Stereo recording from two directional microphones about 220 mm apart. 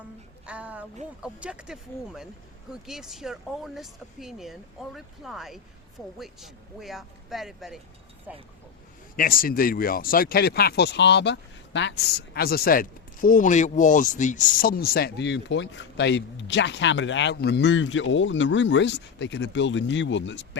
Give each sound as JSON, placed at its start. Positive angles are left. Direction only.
{"t": 0.4, "sound": "a woman's voice", "side_deg": -5}
{"t": 9.1, "sound": "speech", "side_deg": 40}